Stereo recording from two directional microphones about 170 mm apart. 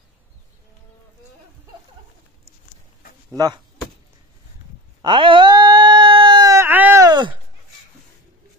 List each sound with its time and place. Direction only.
3.3 s speech: 25° right (ahead or behind)
5.0 s sheep: 30° right (ahead or behind); by 7.1 s 10° right (ahead or behind)
7.1 s a sound: 25° right (ahead or behind)